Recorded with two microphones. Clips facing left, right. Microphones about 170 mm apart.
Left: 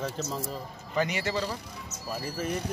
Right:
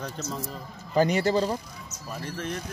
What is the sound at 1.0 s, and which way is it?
Speech, 35° right (ahead or behind).